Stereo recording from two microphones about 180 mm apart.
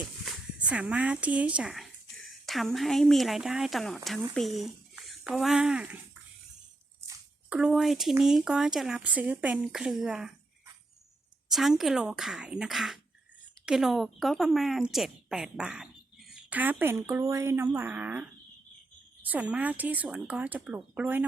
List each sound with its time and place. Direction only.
0.3 s speech: 5° right (ahead or behind)
7.5 s a woman's voice: 5° right (ahead or behind)
11.4 s a woman's voice: centre (ahead or behind)